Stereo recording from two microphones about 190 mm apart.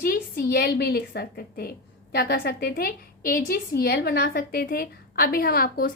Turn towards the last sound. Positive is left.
turn(degrees=50)  # may be behind; listen again after turning